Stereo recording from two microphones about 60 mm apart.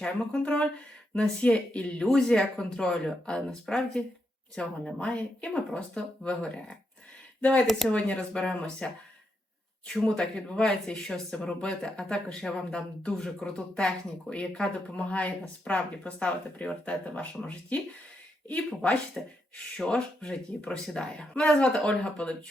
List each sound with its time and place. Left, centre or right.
0.0 s speech: centre
7.9 s speech: left
19.2 s speech: centre